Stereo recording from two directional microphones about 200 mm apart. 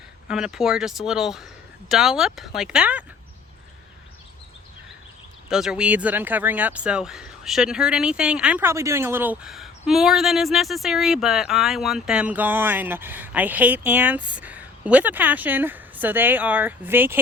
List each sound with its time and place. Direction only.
0.3 s speech: 5° right (ahead or behind)
5.5 s speech: centre (ahead or behind)